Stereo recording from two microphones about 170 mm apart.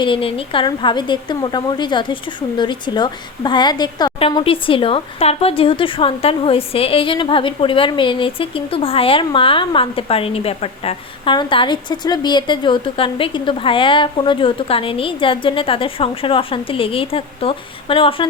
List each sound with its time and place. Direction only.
0.0 s a woman's voice: 30° left (ahead or behind)